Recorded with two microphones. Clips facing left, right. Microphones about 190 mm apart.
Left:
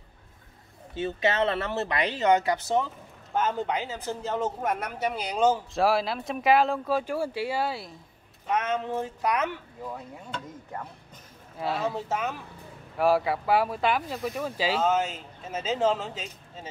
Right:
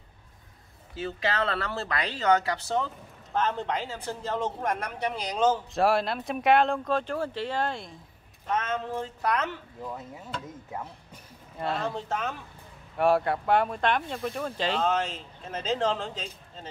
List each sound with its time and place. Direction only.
0.9 s speech: 25° left (ahead or behind)
9.9 s speech: centre (ahead or behind)